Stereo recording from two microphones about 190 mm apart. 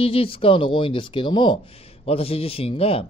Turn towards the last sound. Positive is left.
turn(degrees=30)  # may be behind; listen again after turning